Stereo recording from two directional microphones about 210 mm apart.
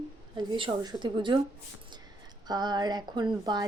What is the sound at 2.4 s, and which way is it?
Speech, 20° right (ahead or behind).